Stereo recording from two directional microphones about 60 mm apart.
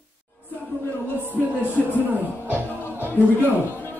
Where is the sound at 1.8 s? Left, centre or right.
Left.